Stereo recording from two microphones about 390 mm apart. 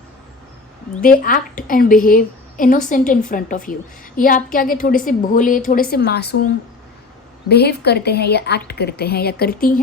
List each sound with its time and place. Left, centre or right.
1.0 s a woman's voice: left
7.4 s a woman's voice: left